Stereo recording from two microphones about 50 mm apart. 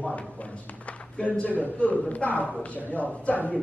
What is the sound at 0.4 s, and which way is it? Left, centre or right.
A man's voice, left.